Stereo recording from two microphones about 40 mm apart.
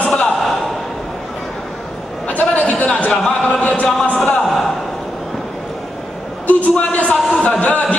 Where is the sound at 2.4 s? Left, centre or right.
Left.